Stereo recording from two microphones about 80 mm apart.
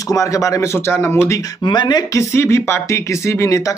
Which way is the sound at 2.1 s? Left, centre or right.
Left.